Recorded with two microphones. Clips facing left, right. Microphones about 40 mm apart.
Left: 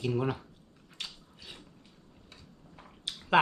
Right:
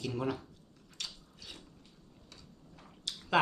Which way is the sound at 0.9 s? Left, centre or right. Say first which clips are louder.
Left 2 dB; left.